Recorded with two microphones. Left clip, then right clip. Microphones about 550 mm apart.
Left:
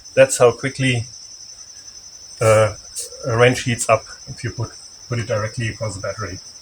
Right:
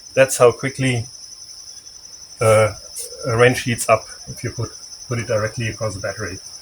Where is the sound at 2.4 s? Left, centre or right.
Right.